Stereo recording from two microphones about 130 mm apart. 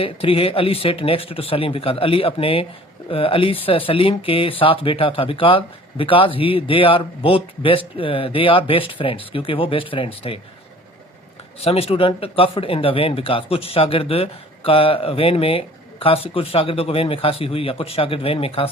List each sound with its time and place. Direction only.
0.0 s speech: 45° left (ahead or behind)
11.6 s speech: 50° left (ahead or behind)